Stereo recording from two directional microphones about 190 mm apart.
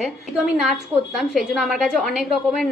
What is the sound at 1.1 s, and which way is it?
A woman's voice, centre (ahead or behind).